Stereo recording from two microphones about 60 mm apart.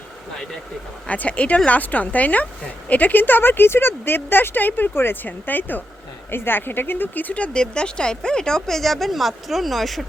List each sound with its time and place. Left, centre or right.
1.0 s speech: left; by 10.1 s centre